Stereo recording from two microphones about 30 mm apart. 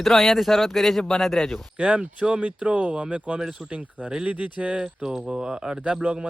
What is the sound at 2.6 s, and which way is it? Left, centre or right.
Speech, right.